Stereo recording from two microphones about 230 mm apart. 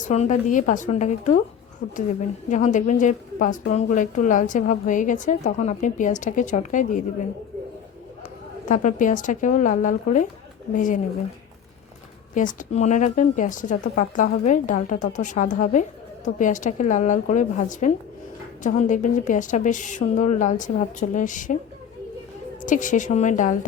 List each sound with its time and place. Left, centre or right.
0.0 s speech: left
8.6 s speech: left
12.3 s speech: left
22.6 s speech: left